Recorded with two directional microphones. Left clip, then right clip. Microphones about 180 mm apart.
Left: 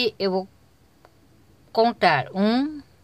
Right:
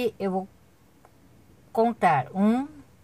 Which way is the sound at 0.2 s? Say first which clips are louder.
Left 5 dB; 25° left (ahead or behind).